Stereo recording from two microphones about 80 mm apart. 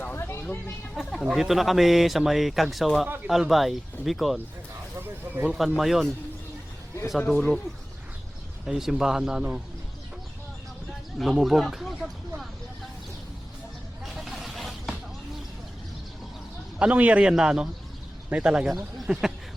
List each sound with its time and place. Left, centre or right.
0.0 s a sound: left
0.9 s speech: centre
4.9 s speech: right
5.5 s speech: centre
7.2 s speech: centre
8.6 s a man's voice: centre
11.2 s speech: centre
14.0 s vehicle: centre
16.7 s a man's voice: centre